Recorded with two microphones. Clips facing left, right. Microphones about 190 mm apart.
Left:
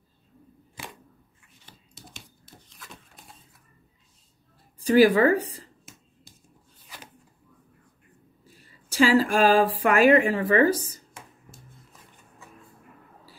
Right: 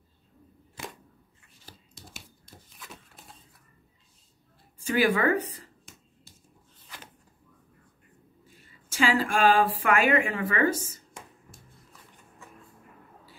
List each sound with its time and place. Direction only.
4.7 s speech: 35° left (ahead or behind)
8.5 s speech: 40° left (ahead or behind)